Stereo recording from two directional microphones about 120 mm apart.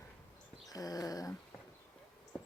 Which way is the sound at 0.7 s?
30° left (ahead or behind).